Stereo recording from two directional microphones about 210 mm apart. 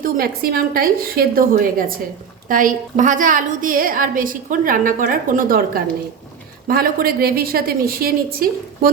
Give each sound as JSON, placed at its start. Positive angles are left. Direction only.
{"t": 0.0, "sound": "a woman's voice", "side_deg": -45}